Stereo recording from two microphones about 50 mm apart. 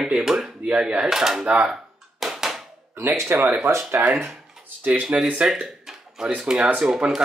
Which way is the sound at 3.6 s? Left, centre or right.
Right.